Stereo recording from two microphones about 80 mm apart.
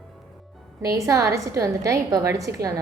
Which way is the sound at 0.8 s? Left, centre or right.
Right.